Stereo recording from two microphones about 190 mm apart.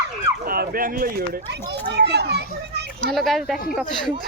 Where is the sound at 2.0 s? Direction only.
60° right (ahead or behind).